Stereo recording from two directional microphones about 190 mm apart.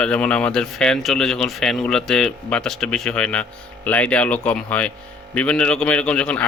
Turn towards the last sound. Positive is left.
turn(degrees=5)  # may be behind; listen again after turning